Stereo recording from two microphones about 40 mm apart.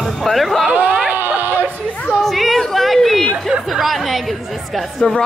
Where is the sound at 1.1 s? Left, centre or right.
Right.